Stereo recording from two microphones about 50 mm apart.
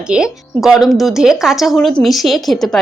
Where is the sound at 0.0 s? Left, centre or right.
Centre.